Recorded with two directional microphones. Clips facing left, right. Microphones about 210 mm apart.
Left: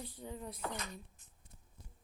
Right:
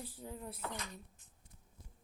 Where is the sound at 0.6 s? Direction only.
40° left (ahead or behind).